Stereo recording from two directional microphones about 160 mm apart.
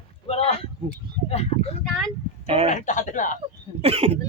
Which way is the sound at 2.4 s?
35° right (ahead or behind).